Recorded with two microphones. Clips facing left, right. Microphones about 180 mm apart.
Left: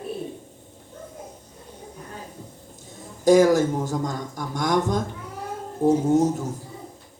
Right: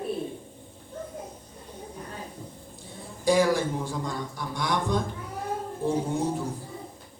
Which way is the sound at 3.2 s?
45° left (ahead or behind).